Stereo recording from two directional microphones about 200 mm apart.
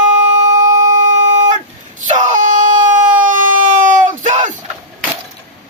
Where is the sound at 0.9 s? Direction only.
40° right (ahead or behind).